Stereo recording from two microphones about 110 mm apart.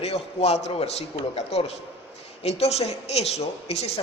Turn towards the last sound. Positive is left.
turn(degrees=75)  # may be behind; listen again after turning